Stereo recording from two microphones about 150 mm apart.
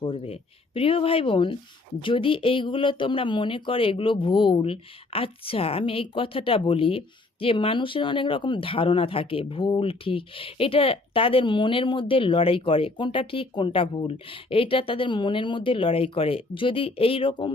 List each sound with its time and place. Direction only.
0.0 s speech: 40° left (ahead or behind)